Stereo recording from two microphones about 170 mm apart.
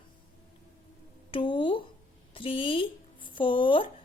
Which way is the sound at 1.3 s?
30° left (ahead or behind).